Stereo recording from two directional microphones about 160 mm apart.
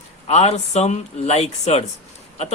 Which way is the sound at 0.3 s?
45° left (ahead or behind).